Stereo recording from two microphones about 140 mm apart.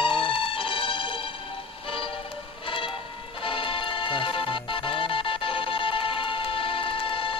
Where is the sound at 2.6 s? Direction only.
40° left (ahead or behind).